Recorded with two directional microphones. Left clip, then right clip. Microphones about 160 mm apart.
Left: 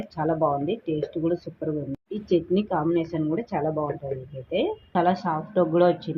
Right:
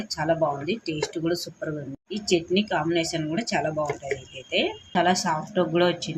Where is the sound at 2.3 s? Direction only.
30° left (ahead or behind).